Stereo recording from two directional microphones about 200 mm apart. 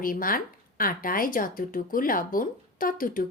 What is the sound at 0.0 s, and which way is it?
Speech, 45° left (ahead or behind).